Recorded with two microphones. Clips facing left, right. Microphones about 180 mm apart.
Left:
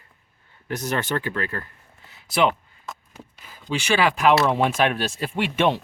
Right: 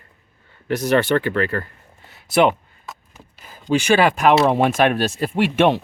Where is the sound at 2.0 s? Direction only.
55° right (ahead or behind).